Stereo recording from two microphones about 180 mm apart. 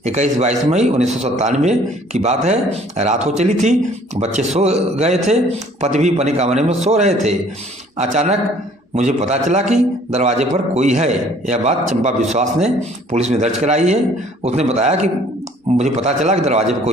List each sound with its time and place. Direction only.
0.0 s speech: 40° right (ahead or behind)